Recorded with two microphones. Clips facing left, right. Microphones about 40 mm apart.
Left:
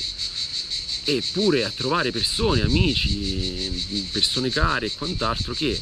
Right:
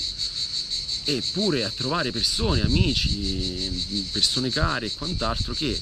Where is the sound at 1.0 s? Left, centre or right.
Left.